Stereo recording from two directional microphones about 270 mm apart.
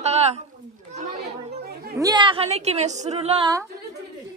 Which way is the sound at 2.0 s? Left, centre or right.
Centre.